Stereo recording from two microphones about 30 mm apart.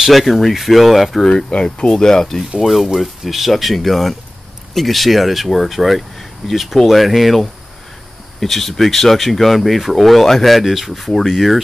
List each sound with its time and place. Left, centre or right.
0.1 s speech: centre
1.5 s speech: left
1.9 s speech: left
2.6 s speech: centre
8.4 s speech: centre
11.1 s speech: centre